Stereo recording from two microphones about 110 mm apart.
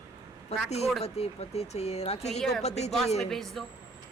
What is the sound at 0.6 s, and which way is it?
Speech, 75° left (ahead or behind).